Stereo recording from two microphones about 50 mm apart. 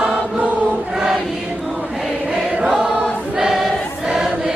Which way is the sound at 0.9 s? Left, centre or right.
Centre.